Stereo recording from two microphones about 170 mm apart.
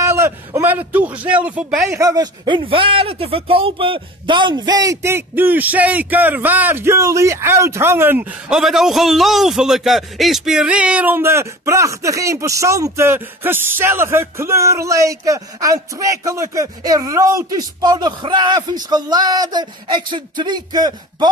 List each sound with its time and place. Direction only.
0.0 s a man's voice: 15° right (ahead or behind)